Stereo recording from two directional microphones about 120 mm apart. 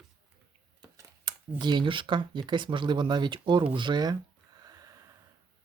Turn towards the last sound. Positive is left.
turn(degrees=-30)  # may be behind; listen again after turning